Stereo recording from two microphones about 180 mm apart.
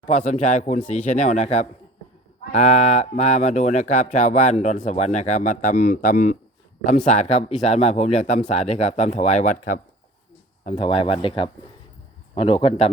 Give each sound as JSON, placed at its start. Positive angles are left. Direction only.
{"t": 0.2, "sound": "speech", "side_deg": 45}
{"t": 10.7, "sound": "speech", "side_deg": 30}